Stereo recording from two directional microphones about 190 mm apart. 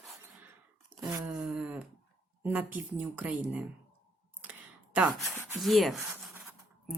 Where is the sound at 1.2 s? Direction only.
5° right (ahead or behind).